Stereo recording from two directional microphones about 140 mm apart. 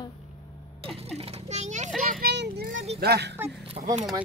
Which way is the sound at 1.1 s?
45° right (ahead or behind).